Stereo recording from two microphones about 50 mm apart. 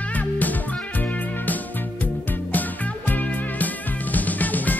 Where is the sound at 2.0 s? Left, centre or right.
Left.